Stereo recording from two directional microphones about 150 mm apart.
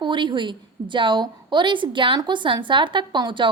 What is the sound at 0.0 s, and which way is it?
A woman's voice, 30° right (ahead or behind).